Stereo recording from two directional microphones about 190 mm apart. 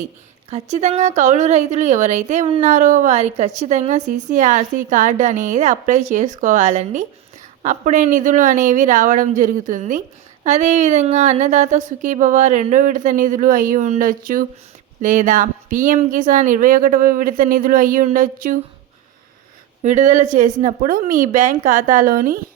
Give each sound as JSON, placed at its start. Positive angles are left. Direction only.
{"t": 0.5, "sound": "speech", "side_deg": -35}
{"t": 19.8, "sound": "speech", "side_deg": -40}